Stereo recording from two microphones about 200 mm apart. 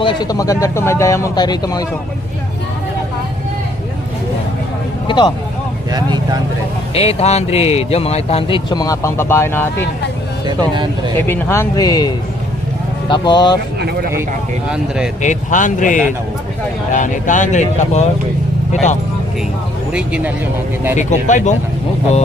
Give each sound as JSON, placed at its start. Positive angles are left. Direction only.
{"t": 0.0, "sound": "speech", "side_deg": 20}
{"t": 5.0, "sound": "speech", "side_deg": 25}
{"t": 5.9, "sound": "speech", "side_deg": -20}
{"t": 6.9, "sound": "speech", "side_deg": 30}
{"t": 10.4, "sound": "speech", "side_deg": -20}
{"t": 11.3, "sound": "speech", "side_deg": 10}
{"t": 13.7, "sound": "speech", "side_deg": -55}
{"t": 14.7, "sound": "speech", "side_deg": -5}
{"t": 15.2, "sound": "speech", "side_deg": 40}
{"t": 19.9, "sound": "speech", "side_deg": -5}
{"t": 21.0, "sound": "speech", "side_deg": 35}